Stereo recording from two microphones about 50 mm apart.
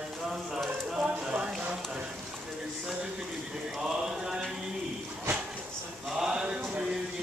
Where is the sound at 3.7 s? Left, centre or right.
Centre.